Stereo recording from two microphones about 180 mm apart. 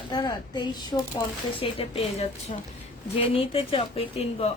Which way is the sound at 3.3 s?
30° left (ahead or behind).